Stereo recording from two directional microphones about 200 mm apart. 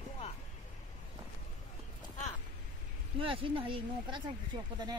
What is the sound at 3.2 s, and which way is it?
Speech, 25° right (ahead or behind).